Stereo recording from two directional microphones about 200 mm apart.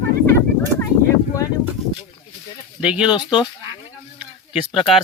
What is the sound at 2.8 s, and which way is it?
Speech, 5° right (ahead or behind).